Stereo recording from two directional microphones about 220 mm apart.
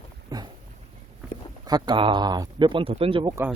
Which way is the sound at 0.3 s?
15° right (ahead or behind).